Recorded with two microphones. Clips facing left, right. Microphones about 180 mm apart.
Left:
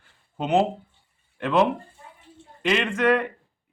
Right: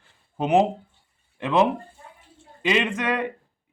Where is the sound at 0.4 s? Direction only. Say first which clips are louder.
Right 2 dB; 15° right (ahead or behind).